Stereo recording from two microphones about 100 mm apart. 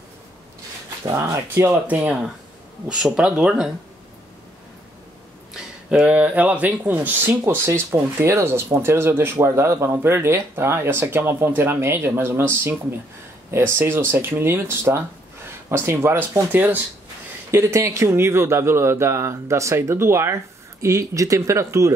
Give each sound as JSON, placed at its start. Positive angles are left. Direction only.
{"t": 1.0, "sound": "speech", "side_deg": -30}
{"t": 2.0, "sound": "speech", "side_deg": -10}
{"t": 5.5, "sound": "speech", "side_deg": -10}